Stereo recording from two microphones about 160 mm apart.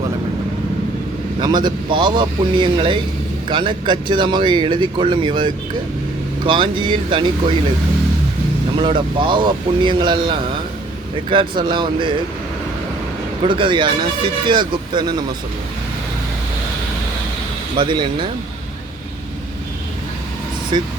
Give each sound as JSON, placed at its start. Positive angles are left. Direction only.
{"t": 1.4, "sound": "speech", "side_deg": -30}
{"t": 8.8, "sound": "speech", "side_deg": -30}
{"t": 13.4, "sound": "speech", "side_deg": -30}
{"t": 17.7, "sound": "speech", "side_deg": -30}
{"t": 20.7, "sound": "speech", "side_deg": -30}